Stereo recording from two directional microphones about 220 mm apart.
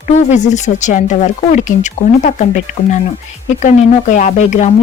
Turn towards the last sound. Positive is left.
turn(degrees=35)  # may be behind; listen again after turning